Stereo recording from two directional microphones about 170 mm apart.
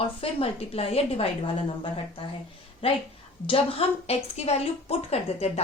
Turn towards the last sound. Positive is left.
turn(degrees=35)  # may be behind; listen again after turning